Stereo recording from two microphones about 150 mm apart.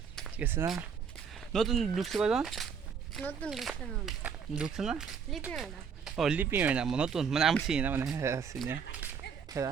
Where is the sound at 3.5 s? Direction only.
Centre (ahead or behind).